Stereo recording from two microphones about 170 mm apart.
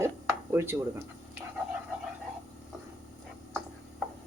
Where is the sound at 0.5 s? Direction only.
15° right (ahead or behind).